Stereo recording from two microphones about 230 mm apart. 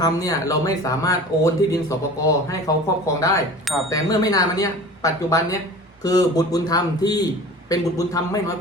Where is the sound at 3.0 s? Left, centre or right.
Centre.